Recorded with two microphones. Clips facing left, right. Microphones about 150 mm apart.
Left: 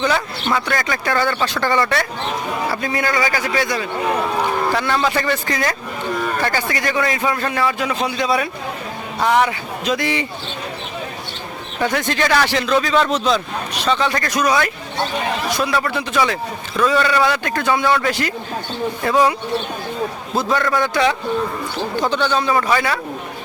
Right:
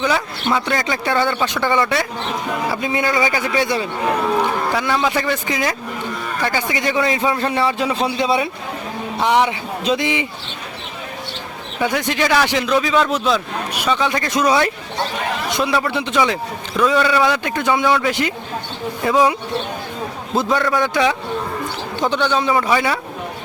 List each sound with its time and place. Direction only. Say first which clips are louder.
0.0 s speech: even; 10° right (ahead or behind)
0.5 s speech: right 1 dB; 20° right (ahead or behind)
4.7 s a man's voice: even; 10° right (ahead or behind)
11.8 s a man's voice: even; 10° right (ahead or behind)
17.0 s speech: right 1 dB; 5° right (ahead or behind)
17.2 s speech: right 1 dB; 20° right (ahead or behind)
20.3 s a man's voice: right 2 dB; 20° right (ahead or behind)